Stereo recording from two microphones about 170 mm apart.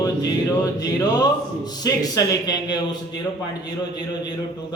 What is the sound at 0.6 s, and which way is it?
Speech, 20° left (ahead or behind).